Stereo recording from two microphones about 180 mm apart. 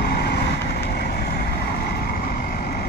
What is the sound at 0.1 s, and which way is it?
Vehicle, 65° left (ahead or behind).